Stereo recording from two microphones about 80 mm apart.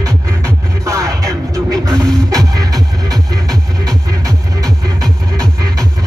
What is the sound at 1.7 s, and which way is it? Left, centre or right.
Music, centre.